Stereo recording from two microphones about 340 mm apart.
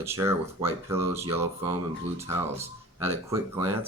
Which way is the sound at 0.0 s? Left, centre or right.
Centre.